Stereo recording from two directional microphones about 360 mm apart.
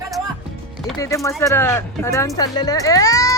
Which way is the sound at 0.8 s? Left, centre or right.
Centre.